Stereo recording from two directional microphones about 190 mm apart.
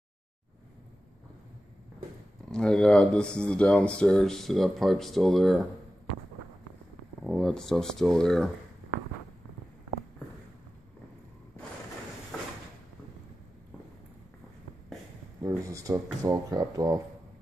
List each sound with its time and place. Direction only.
2.5 s speech: 5° left (ahead or behind)
7.2 s speech: centre (ahead or behind)
15.4 s speech: 15° right (ahead or behind)